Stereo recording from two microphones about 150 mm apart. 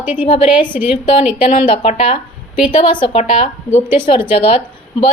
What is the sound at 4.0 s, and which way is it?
Speech, 35° left (ahead or behind).